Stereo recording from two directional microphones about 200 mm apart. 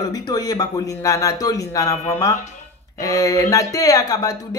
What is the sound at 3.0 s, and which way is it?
Speech, 15° left (ahead or behind).